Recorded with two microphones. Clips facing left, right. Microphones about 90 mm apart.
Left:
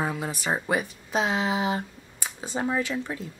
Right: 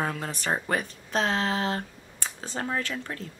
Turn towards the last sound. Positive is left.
turn(degrees=10)  # may be behind; listen again after turning